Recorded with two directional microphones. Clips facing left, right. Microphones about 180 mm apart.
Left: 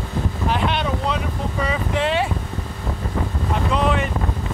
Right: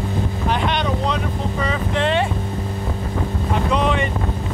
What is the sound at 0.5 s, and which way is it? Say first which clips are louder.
Speech: right 1 dB; 5° left (ahead or behind).